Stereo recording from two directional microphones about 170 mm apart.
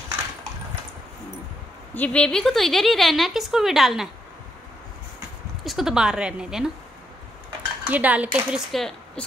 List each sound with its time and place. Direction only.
2.0 s a woman's voice: 5° left (ahead or behind)
5.6 s a woman's voice: centre (ahead or behind)
7.8 s speech: 10° right (ahead or behind)